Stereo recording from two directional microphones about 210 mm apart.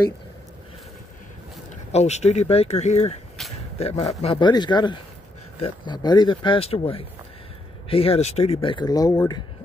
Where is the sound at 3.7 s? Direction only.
30° left (ahead or behind).